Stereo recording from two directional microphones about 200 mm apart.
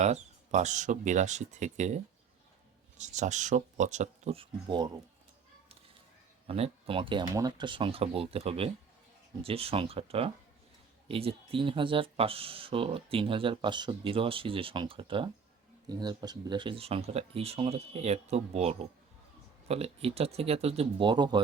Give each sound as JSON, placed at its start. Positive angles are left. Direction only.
{"t": 0.0, "sound": "speech", "side_deg": -35}
{"t": 3.0, "sound": "speech", "side_deg": -35}
{"t": 6.5, "sound": "speech", "side_deg": -30}